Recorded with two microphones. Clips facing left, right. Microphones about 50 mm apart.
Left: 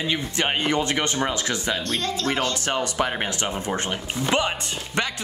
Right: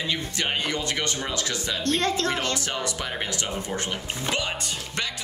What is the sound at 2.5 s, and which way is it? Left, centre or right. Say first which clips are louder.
Speech: left 5 dB; left.